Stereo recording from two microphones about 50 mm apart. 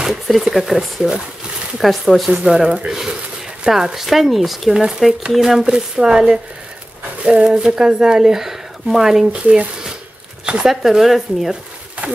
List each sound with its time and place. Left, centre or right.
0.0 s speech: centre
1.8 s speech: centre
2.4 s speech: centre
9.3 s speech: centre
10.7 s speech: centre